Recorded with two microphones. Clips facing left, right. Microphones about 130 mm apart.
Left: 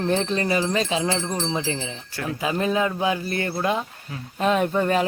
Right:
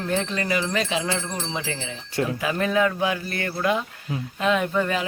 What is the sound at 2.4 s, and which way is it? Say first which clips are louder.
Speech: left 1 dB; 25° left (ahead or behind).